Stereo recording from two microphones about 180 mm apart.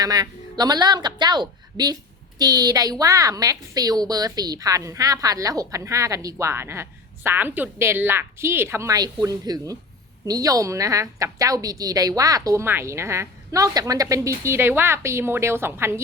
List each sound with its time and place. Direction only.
0.0 s a woman's voice: 20° right (ahead or behind)